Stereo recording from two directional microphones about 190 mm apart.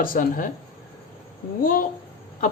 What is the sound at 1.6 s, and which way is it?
Speech, 45° left (ahead or behind).